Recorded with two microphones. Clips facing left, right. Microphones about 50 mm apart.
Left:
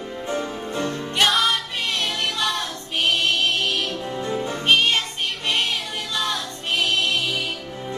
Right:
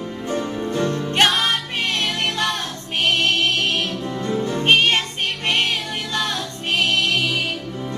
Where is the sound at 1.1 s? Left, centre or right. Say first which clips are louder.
Even; right.